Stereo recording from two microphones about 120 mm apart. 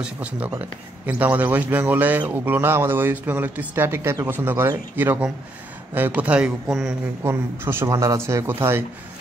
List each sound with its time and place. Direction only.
0.0 s speech: 10° right (ahead or behind)
7.2 s speech: 20° right (ahead or behind)